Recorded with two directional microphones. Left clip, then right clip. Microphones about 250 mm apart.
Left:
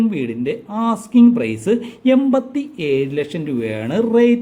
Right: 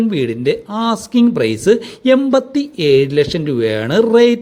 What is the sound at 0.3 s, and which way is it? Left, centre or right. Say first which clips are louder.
Speech: right 6 dB; centre.